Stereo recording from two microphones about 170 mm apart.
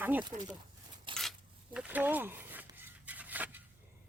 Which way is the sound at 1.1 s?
30° right (ahead or behind).